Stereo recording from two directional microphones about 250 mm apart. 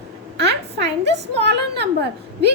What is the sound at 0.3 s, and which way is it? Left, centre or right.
A woman's voice, right.